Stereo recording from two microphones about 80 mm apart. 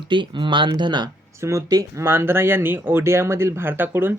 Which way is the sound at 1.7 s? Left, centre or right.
Right.